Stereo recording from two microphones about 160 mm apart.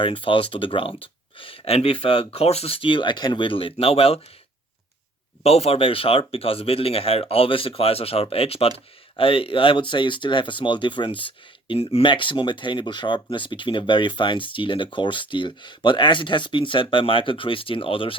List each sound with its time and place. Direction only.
0.0 s speech: 35° left (ahead or behind)
5.4 s speech: 40° left (ahead or behind)